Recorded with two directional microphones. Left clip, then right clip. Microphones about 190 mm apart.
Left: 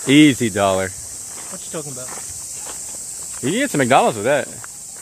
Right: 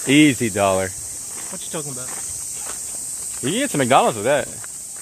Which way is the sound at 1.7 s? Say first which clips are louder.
Left 1 dB; 45° right (ahead or behind).